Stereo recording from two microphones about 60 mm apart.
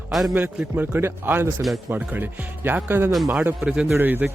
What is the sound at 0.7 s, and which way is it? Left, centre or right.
Speech, right.